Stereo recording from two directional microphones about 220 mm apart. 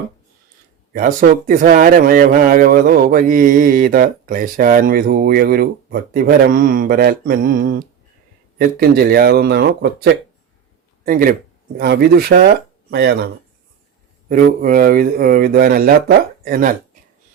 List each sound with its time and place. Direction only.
0.9 s speech: 40° right (ahead or behind)